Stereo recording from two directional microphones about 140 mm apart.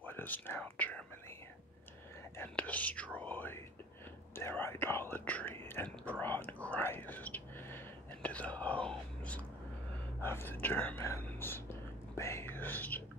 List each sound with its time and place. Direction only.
0.0 s speech: 15° left (ahead or behind)
2.3 s speech: 10° left (ahead or behind)
5.9 s whispering: 10° left (ahead or behind)
10.2 s speech: 15° left (ahead or behind)
12.2 s whispering: 20° left (ahead or behind)